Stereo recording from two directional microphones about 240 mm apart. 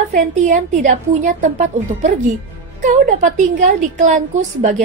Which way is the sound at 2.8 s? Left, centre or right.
Right.